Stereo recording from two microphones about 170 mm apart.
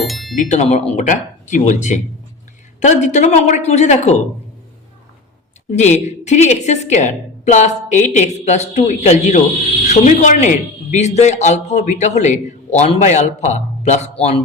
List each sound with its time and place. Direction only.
0.0 s music: centre (ahead or behind)
0.3 s a woman's voice: 45° left (ahead or behind)
5.7 s a woman's voice: 45° left (ahead or behind)